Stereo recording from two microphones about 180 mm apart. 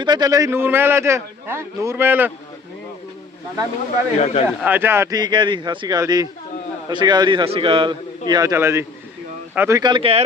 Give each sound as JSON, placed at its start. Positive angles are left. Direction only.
{"t": 0.0, "sound": "a man's voice", "side_deg": -25}
{"t": 4.2, "sound": "a man's voice", "side_deg": 40}
{"t": 4.4, "sound": "a man's voice", "side_deg": -10}